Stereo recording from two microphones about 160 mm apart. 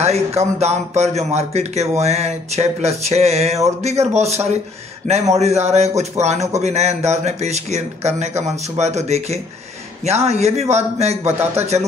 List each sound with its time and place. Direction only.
0.0 s a man's voice: 40° right (ahead or behind)